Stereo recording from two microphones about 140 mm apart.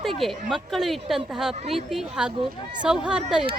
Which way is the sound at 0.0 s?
Centre (ahead or behind).